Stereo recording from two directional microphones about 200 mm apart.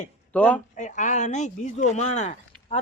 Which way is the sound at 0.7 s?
40° left (ahead or behind).